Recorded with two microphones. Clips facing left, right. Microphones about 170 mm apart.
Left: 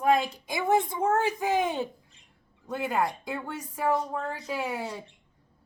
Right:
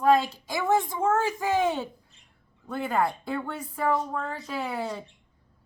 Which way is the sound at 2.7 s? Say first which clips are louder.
Right 1 dB; 10° left (ahead or behind).